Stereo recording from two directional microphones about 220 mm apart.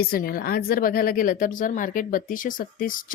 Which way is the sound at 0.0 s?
40° left (ahead or behind).